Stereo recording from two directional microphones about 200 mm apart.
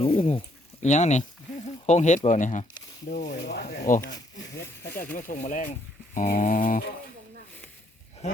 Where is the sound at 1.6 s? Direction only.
35° left (ahead or behind).